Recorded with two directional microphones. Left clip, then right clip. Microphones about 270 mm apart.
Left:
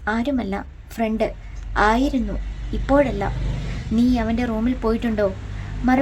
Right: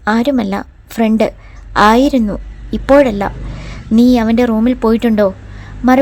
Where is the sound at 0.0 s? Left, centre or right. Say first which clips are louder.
Right 9 dB; right.